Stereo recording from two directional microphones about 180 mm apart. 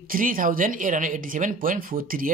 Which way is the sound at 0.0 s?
50° right (ahead or behind).